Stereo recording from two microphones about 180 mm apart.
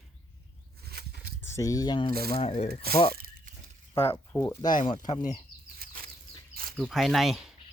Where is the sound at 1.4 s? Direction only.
15° left (ahead or behind); by 2.8 s 35° left (ahead or behind).